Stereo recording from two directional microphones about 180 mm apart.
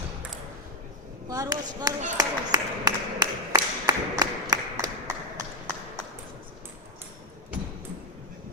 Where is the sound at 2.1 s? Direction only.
20° right (ahead or behind).